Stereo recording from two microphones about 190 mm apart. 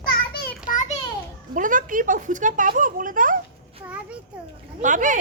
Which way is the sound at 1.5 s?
45° right (ahead or behind).